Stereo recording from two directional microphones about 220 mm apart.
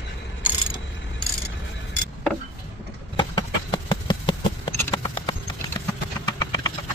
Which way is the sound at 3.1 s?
20° left (ahead or behind).